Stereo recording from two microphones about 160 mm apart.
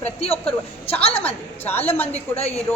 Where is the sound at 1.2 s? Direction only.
10° left (ahead or behind).